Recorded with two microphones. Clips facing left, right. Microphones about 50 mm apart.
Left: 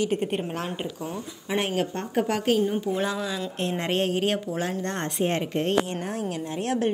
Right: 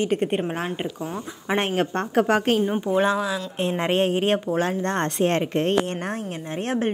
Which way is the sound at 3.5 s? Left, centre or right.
Right.